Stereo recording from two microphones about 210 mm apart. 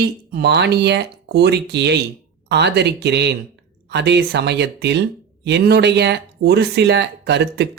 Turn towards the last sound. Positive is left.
turn(degrees=-55)  # may be behind; listen again after turning